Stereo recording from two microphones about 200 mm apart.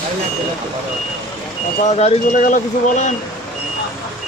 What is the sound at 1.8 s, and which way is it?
Speech, 35° left (ahead or behind).